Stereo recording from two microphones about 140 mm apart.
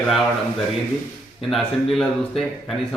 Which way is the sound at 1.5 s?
Centre (ahead or behind).